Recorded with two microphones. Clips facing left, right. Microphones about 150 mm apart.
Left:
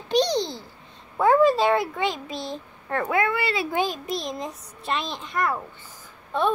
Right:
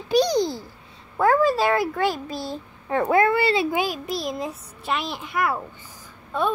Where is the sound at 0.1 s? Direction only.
10° right (ahead or behind).